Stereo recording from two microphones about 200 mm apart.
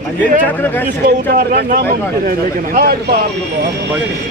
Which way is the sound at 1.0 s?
50° right (ahead or behind).